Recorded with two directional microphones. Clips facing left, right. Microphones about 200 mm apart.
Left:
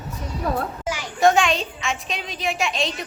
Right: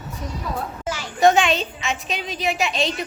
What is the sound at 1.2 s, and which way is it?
A child's voice, centre (ahead or behind).